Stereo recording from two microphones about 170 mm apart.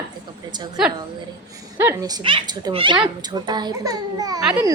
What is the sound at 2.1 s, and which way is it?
A child's voice, 30° right (ahead or behind).